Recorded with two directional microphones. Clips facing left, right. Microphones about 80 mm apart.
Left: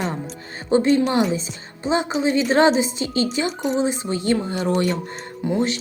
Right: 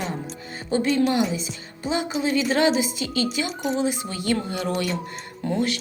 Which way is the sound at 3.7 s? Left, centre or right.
Left.